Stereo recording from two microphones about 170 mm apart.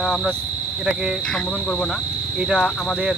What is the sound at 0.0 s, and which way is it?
Speech, centre (ahead or behind).